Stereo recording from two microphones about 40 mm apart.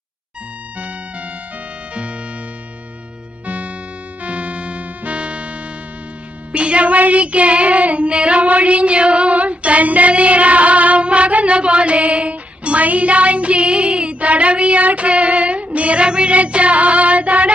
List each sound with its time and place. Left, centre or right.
0.8 s music: right
3.4 s music: right
6.5 s child singing: right